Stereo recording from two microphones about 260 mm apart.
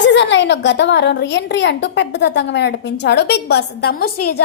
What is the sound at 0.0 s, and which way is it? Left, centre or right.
A woman's voice, left.